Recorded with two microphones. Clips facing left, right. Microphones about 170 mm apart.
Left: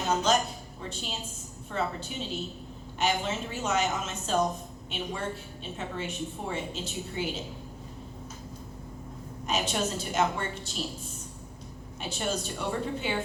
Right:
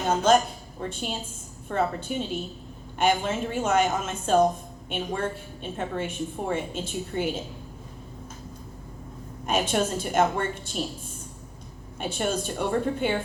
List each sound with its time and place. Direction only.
0.0 s a woman's voice: 55° right (ahead or behind)
9.5 s a woman's voice: 55° right (ahead or behind)
11.9 s a woman's voice: 50° right (ahead or behind)